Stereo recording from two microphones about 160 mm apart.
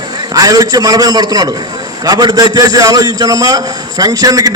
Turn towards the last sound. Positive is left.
turn(degrees=-25)  # may be behind; listen again after turning